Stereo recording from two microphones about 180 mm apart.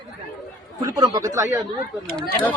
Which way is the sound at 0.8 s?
20° right (ahead or behind).